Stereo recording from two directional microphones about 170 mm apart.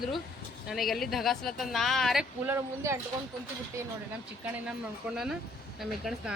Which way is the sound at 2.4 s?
15° right (ahead or behind).